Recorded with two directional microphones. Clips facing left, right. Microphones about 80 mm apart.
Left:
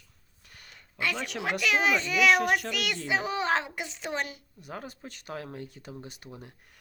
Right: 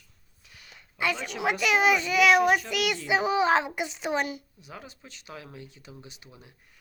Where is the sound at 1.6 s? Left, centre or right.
Centre.